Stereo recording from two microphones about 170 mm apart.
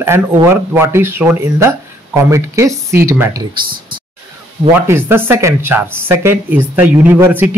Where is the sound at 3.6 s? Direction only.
55° right (ahead or behind).